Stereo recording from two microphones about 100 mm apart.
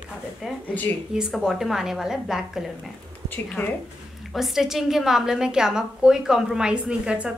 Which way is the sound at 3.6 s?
25° left (ahead or behind).